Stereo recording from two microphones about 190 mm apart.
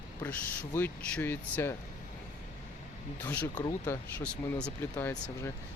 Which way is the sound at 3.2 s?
10° left (ahead or behind).